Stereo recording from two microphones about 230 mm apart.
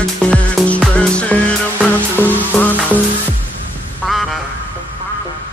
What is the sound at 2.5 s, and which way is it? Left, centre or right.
Music, centre.